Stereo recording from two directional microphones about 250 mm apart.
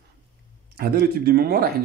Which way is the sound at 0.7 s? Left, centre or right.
Right.